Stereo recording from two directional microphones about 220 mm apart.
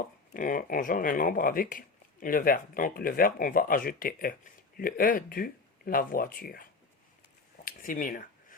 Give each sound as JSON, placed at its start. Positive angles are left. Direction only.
{"t": 0.3, "sound": "speech", "side_deg": 40}